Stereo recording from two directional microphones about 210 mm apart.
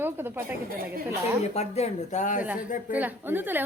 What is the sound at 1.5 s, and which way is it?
Speech, 30° left (ahead or behind).